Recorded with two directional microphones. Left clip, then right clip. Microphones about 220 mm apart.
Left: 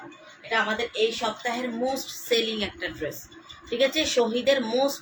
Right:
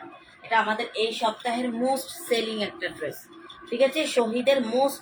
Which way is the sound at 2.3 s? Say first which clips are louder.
Left 1 dB; 20° left (ahead or behind).